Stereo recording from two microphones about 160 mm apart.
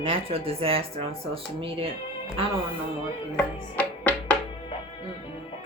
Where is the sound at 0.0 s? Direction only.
35° right (ahead or behind).